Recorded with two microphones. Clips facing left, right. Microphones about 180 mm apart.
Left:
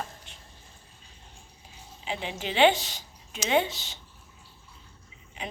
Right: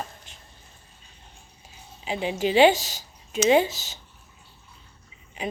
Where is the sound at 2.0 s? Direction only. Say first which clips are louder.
Right 8 dB; 10° right (ahead or behind).